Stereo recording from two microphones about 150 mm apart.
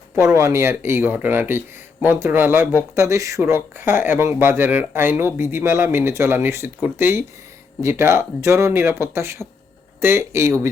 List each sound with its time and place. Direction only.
0.2 s speech: 20° right (ahead or behind)